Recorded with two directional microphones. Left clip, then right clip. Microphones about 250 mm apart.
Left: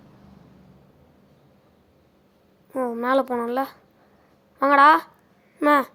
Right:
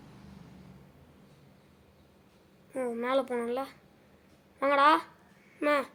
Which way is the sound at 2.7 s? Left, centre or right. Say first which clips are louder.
Left 8 dB; centre.